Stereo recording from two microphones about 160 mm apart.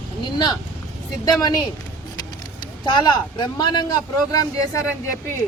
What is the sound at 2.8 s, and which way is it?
Speech, 25° left (ahead or behind).